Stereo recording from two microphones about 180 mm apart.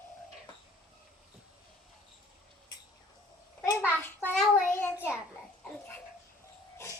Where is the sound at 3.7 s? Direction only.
15° left (ahead or behind).